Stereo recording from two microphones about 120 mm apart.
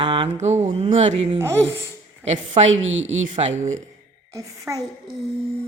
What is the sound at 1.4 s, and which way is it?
Speech, 20° right (ahead or behind).